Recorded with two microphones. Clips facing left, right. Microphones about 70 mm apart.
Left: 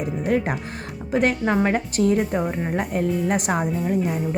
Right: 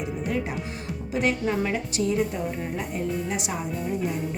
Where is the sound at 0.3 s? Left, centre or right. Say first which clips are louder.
Left 8 dB; left.